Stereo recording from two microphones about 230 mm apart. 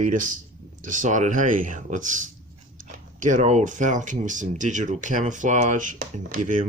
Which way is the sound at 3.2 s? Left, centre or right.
Right.